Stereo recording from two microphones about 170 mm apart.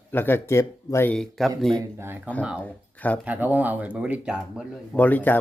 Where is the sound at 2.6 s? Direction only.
10° left (ahead or behind).